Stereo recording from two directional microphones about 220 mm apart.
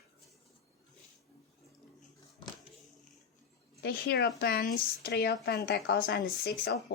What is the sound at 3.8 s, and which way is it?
Speech, 45° left (ahead or behind).